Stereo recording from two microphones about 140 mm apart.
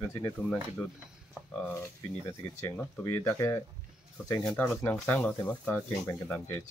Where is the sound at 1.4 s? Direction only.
15° left (ahead or behind).